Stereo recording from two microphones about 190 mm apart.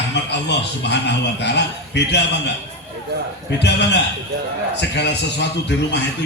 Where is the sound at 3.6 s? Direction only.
65° left (ahead or behind).